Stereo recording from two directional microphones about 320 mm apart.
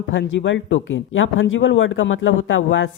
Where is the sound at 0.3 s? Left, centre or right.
Left.